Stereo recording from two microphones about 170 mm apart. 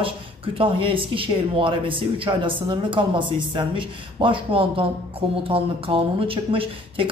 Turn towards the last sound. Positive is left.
turn(degrees=-30)  # may be behind; listen again after turning